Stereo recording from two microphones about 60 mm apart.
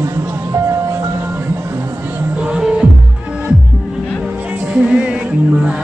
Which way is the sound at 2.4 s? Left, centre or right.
Centre.